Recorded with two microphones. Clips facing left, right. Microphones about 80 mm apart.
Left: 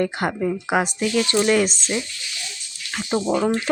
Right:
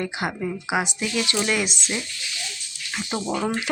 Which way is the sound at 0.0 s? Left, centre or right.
Left.